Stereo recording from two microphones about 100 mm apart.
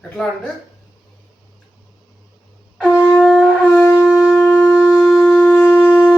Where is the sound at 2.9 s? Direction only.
30° left (ahead or behind).